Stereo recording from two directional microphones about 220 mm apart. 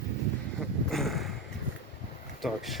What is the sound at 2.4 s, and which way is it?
Speech, centre (ahead or behind).